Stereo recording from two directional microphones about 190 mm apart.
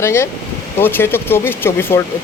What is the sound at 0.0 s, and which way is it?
Speech, 15° left (ahead or behind).